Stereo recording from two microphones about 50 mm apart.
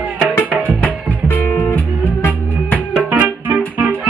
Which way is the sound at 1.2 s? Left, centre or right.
Left.